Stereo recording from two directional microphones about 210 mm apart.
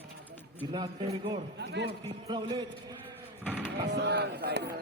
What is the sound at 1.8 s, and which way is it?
Speech, 20° right (ahead or behind).